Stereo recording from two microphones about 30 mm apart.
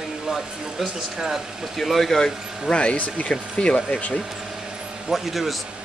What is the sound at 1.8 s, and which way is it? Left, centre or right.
Speech, centre.